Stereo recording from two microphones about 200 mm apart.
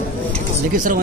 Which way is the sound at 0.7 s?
40° right (ahead or behind).